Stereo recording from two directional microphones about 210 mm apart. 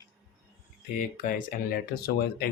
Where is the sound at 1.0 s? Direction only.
40° left (ahead or behind).